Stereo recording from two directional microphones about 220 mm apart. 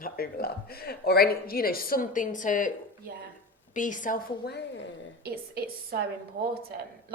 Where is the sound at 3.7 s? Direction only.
35° left (ahead or behind).